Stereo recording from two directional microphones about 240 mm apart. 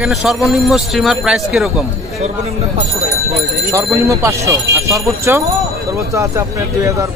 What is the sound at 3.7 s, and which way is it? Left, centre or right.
Speech, centre.